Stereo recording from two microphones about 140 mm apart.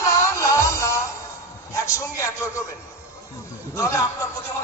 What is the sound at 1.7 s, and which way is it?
Speech, 20° left (ahead or behind).